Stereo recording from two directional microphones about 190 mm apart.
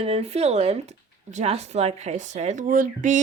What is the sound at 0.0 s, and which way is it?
Speech, 30° right (ahead or behind).